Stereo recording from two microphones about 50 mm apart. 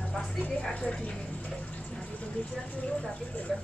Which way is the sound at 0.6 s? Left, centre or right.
Centre.